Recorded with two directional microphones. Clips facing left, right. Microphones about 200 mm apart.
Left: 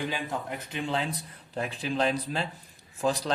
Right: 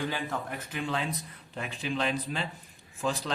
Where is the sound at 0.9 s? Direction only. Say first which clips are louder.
Left 3 dB; 30° left (ahead or behind).